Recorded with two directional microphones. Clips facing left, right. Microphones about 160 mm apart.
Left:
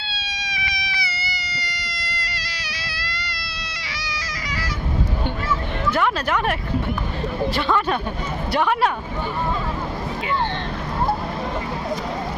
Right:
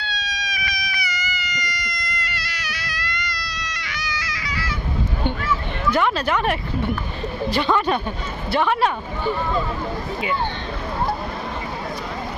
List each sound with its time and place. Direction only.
0.0 s cat: 25° left (ahead or behind)
6.0 s a woman's voice: 5° left (ahead or behind)